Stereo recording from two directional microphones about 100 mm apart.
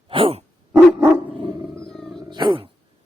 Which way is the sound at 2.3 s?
50° right (ahead or behind).